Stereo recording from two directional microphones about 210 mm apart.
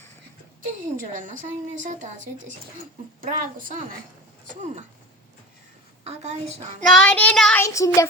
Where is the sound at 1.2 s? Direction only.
35° right (ahead or behind).